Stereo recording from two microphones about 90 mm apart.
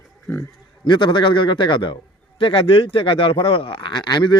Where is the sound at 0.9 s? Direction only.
60° left (ahead or behind).